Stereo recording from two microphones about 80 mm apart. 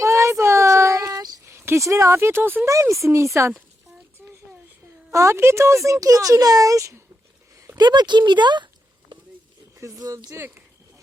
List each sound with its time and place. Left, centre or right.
0.0 s child singing: right
1.5 s speech: right
2.9 s speech: right
4.2 s a sound: centre
5.1 s speech: right
7.8 s speech: right
9.7 s speech: right